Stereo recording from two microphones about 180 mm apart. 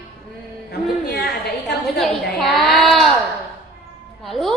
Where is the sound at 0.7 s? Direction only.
65° left (ahead or behind).